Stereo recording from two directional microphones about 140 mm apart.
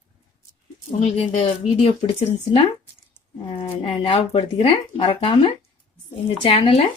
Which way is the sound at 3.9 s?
40° left (ahead or behind).